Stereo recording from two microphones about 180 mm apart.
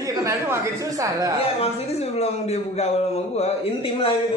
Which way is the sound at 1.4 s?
35° left (ahead or behind).